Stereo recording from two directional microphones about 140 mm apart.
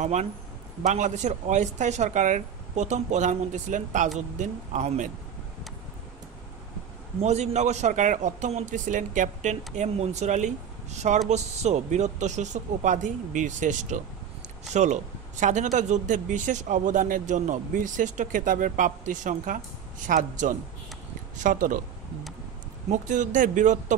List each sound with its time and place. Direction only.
0.0 s speech: 55° right (ahead or behind)
7.2 s speech: 50° right (ahead or behind); by 21.8 s 70° right (ahead or behind)
22.8 s speech: 65° right (ahead or behind)